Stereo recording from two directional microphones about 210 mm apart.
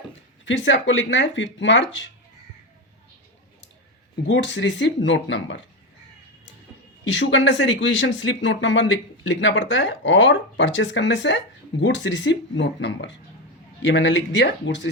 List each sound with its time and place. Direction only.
0.4 s speech: 60° left (ahead or behind)
4.3 s speech: 60° left (ahead or behind)
7.1 s speech: 60° left (ahead or behind)